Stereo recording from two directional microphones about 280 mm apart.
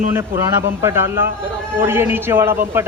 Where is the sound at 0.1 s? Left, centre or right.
Centre.